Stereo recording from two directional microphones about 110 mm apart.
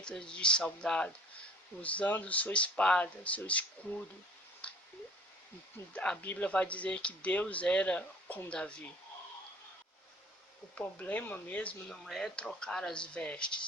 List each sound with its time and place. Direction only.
0.0 s speech: 10° left (ahead or behind)
4.6 s a sound: 10° left (ahead or behind)
5.9 s speech: 10° left (ahead or behind)
10.8 s speech: 15° left (ahead or behind)